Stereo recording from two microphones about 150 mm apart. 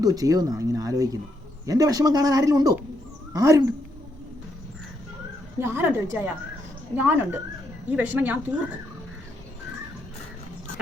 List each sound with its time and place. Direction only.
0.0 s speech: 25° right (ahead or behind)
5.5 s a woman's voice: 15° right (ahead or behind)